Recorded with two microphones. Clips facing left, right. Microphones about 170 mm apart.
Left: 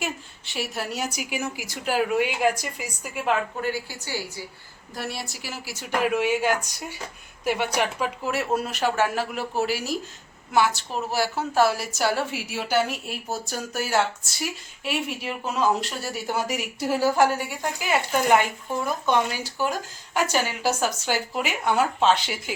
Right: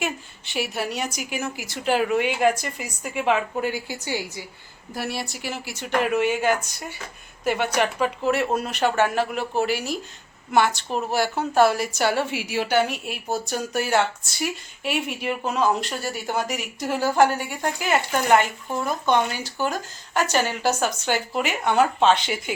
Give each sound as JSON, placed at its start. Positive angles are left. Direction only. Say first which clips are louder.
{"t": 0.0, "sound": "a woman's voice", "louder": "right 3 dB", "side_deg": 0}
{"t": 3.6, "sound": "a woman's voice", "louder": "right 2 dB", "side_deg": -15}
{"t": 4.9, "sound": "a woman's voice", "louder": "right 3 dB", "side_deg": 0}